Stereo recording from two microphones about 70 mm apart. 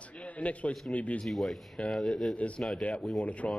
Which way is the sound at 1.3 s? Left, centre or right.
Centre.